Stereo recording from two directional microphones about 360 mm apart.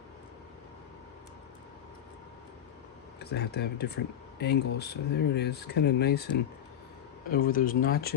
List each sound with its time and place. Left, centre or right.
3.2 s speech: left